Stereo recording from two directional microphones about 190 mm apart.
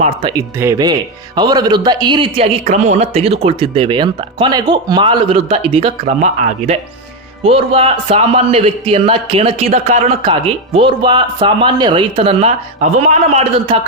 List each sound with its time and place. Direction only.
0.0 s a man's voice: 25° right (ahead or behind)